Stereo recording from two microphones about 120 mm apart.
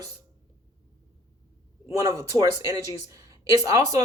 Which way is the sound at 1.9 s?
30° right (ahead or behind).